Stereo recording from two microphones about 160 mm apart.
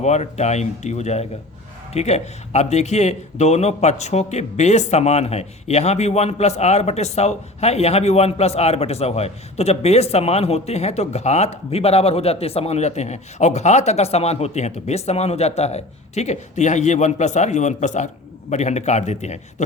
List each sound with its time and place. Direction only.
0.0 s a man's voice: 45° left (ahead or behind)